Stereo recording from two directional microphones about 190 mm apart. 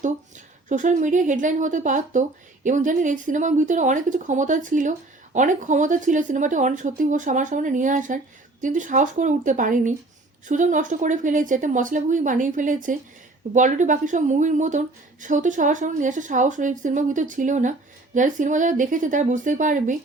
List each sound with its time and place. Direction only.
0.0 s a woman's voice: 40° right (ahead or behind)